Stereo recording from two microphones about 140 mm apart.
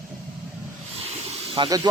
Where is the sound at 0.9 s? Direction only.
45° right (ahead or behind).